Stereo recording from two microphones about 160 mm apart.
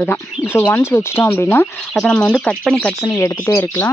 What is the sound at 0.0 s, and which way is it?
Speech, 15° left (ahead or behind).